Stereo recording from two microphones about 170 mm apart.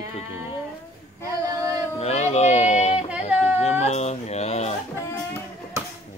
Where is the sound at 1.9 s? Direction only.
40° left (ahead or behind).